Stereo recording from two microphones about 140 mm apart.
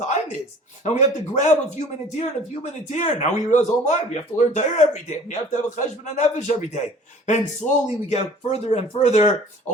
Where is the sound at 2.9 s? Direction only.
60° left (ahead or behind).